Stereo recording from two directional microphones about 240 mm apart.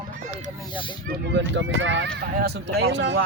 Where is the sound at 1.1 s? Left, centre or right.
Right.